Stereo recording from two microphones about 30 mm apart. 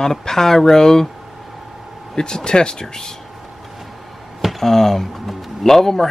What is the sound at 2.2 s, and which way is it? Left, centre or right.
Speech, left.